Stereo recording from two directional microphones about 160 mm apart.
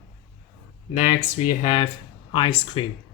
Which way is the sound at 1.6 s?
35° left (ahead or behind).